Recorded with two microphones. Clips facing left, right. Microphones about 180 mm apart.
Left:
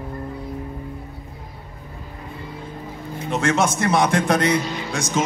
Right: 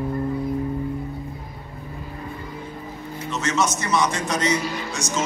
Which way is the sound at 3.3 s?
55° left (ahead or behind).